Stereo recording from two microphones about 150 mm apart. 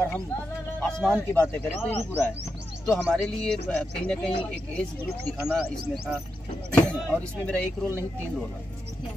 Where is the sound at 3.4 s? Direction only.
5° left (ahead or behind).